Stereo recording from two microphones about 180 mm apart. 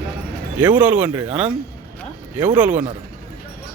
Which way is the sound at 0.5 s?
10° right (ahead or behind).